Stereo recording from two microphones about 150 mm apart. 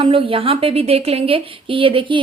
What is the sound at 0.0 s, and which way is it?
A woman's voice, 35° right (ahead or behind).